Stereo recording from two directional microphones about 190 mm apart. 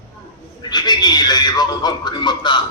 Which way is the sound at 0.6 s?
25° left (ahead or behind).